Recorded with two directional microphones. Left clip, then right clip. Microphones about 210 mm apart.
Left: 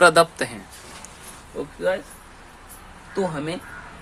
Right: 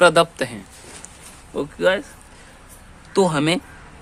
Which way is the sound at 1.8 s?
35° right (ahead or behind).